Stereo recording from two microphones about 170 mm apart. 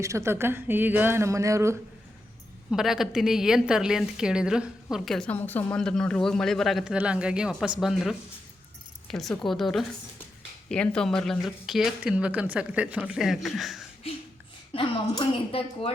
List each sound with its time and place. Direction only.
0.0 s speech: 15° right (ahead or behind)
2.6 s a woman's voice: centre (ahead or behind)
14.7 s a woman's voice: 30° left (ahead or behind)